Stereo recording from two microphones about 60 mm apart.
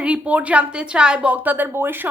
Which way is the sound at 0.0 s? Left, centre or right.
Right.